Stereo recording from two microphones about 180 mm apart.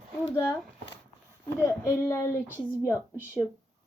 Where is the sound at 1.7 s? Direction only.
15° left (ahead or behind).